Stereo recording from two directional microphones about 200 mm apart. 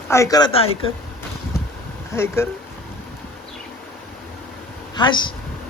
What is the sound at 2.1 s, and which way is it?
Speech, 15° left (ahead or behind).